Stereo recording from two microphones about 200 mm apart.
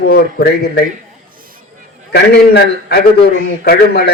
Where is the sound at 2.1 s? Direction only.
55° left (ahead or behind).